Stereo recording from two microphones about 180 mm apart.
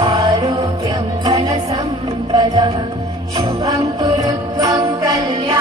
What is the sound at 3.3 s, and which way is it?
Jingle bell, 20° right (ahead or behind).